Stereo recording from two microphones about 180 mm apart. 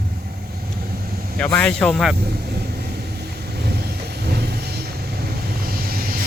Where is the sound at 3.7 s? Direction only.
65° right (ahead or behind).